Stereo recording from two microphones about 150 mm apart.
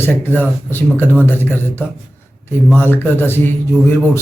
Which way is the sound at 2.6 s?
15° left (ahead or behind).